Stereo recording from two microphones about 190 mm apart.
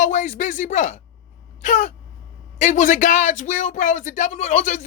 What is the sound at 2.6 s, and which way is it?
Speech, 40° left (ahead or behind).